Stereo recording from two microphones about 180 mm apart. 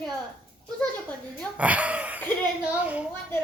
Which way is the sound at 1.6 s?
5° right (ahead or behind).